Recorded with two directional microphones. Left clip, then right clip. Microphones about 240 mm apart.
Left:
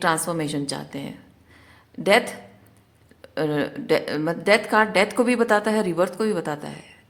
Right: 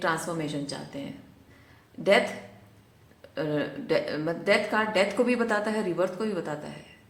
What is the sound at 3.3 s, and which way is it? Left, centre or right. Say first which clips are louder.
A woman's voice: left 5 dB; left.